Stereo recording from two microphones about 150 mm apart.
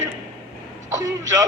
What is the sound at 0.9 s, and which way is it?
Speech, 25° right (ahead or behind).